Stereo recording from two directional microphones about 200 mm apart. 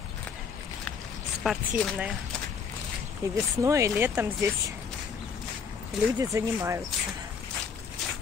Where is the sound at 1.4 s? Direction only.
Centre (ahead or behind).